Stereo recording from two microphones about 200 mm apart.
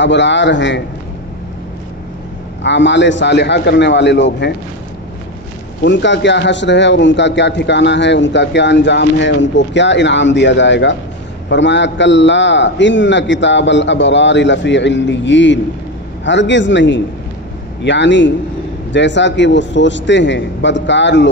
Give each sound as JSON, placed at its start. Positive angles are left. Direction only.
{"t": 0.0, "sound": "a man's voice", "side_deg": 60}
{"t": 2.6, "sound": "a man's voice", "side_deg": 65}
{"t": 5.9, "sound": "a man's voice", "side_deg": 65}